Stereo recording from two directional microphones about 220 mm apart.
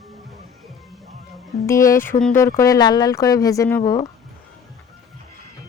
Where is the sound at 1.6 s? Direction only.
15° left (ahead or behind).